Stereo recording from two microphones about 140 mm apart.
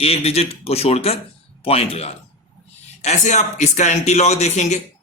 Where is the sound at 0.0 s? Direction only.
45° left (ahead or behind).